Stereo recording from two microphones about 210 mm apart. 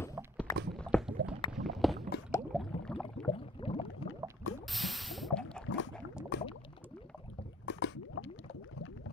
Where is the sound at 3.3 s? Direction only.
25° left (ahead or behind).